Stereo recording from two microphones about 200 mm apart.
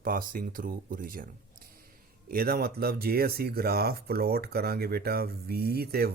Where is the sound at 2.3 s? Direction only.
50° right (ahead or behind).